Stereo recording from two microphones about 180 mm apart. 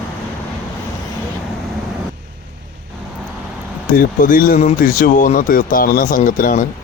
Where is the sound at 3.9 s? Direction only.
50° left (ahead or behind).